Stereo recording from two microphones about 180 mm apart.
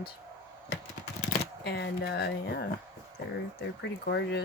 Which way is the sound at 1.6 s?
65° left (ahead or behind).